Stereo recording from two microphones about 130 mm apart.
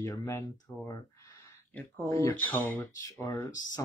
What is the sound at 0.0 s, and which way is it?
Speech, 20° left (ahead or behind).